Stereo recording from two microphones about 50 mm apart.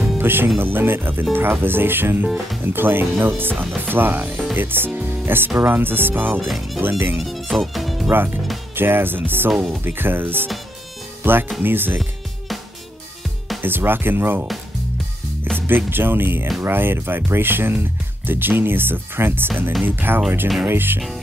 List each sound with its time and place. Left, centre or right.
0.2 s music: right
0.6 s speech: right
2.2 s speech: centre
2.6 s speech: right
6.4 s speech: centre
6.8 s speech: right
7.2 s speech: centre
8.1 s speech: right
9.5 s speech: centre
9.8 s speech: right
13.6 s speech: right
15.6 s speech: right